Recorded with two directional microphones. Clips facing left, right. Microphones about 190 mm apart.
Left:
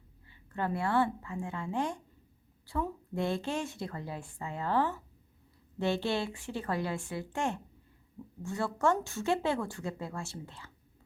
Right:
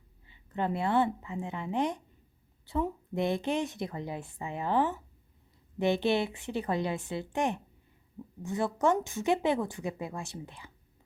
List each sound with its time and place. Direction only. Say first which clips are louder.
0.3 s a woman's voice: right 2 dB; 20° right (ahead or behind)